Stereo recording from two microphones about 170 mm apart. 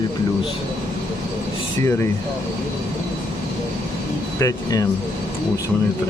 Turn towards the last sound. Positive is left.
turn(degrees=20)  # may be behind; listen again after turning